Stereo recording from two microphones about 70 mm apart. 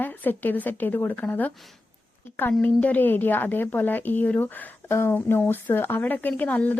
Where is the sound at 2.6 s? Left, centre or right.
Left.